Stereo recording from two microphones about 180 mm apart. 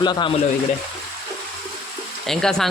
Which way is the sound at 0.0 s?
25° left (ahead or behind).